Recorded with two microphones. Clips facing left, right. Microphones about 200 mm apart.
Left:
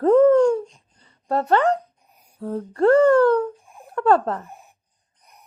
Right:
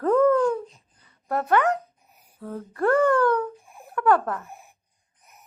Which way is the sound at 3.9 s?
25° left (ahead or behind).